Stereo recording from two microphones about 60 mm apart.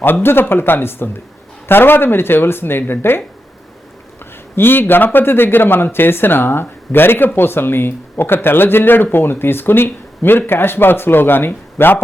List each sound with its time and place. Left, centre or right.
0.0 s speech: left
4.5 s speech: left